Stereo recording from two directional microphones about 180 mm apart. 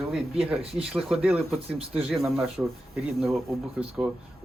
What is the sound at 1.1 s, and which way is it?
Speech, 5° right (ahead or behind).